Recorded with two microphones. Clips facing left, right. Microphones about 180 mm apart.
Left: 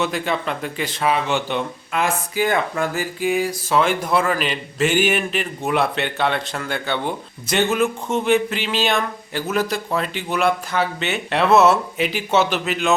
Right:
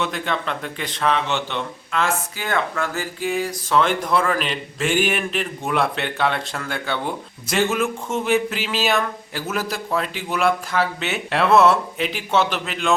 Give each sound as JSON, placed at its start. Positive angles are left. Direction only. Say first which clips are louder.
{"t": 0.0, "sound": "speech", "louder": "left 2 dB", "side_deg": 5}